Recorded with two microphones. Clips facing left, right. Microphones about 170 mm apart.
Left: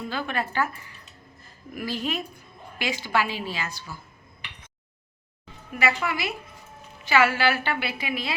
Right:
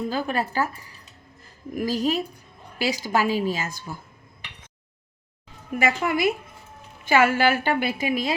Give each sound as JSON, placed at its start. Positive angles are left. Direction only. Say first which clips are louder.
{"t": 0.1, "sound": "a woman's voice", "louder": "right 3 dB", "side_deg": -40}
{"t": 5.8, "sound": "a woman's voice", "louder": "right 4 dB", "side_deg": -45}